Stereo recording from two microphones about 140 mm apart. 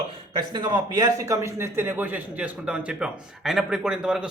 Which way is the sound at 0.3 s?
30° right (ahead or behind).